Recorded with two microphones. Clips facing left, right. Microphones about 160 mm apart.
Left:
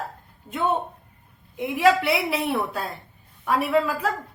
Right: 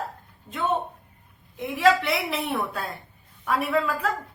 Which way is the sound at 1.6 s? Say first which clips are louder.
Left 1 dB; 10° left (ahead or behind).